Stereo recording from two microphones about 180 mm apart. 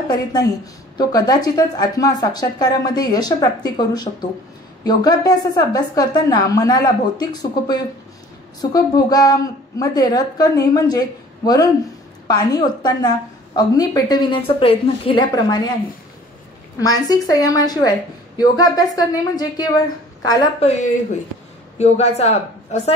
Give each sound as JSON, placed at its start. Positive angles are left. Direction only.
{"t": 0.9, "sound": "speech", "side_deg": 20}
{"t": 16.8, "sound": "speech", "side_deg": 20}
{"t": 20.6, "sound": "a woman's voice", "side_deg": 40}